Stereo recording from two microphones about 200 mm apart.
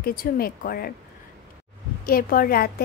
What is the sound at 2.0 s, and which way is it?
Speech, 45° left (ahead or behind).